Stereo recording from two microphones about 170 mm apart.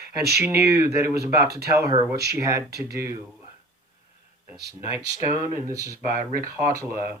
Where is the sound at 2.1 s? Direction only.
70° right (ahead or behind).